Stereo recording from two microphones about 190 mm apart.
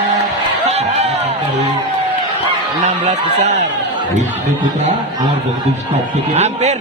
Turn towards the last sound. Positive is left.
turn(degrees=-35)  # may be behind; listen again after turning